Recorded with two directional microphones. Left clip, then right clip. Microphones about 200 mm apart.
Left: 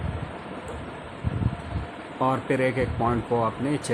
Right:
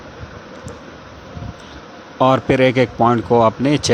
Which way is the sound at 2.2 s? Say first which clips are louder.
Right 10 dB; 35° right (ahead or behind).